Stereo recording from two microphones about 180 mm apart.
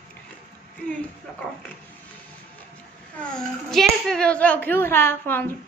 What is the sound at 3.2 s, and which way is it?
A woman's voice, 5° left (ahead or behind).